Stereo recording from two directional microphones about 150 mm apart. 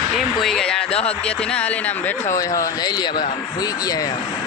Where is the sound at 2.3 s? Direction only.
20° left (ahead or behind).